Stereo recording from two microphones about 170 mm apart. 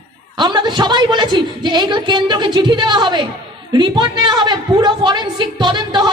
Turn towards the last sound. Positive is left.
turn(degrees=-25)  # may be behind; listen again after turning